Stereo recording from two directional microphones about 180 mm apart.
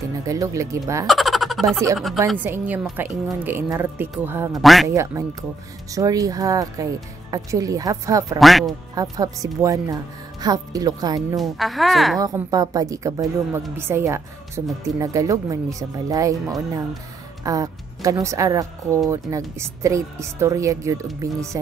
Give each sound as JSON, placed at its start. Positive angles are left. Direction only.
{"t": 0.2, "sound": "a woman's voice", "side_deg": -20}
{"t": 1.0, "sound": "a woman's voice", "side_deg": 0}
{"t": 4.5, "sound": "speech", "side_deg": 0}
{"t": 4.8, "sound": "a woman's voice", "side_deg": -15}
{"t": 8.4, "sound": "speech", "side_deg": 0}
{"t": 8.9, "sound": "speech", "side_deg": -20}
{"t": 11.3, "sound": "speech", "side_deg": 0}
{"t": 12.2, "sound": "a woman's voice", "side_deg": -20}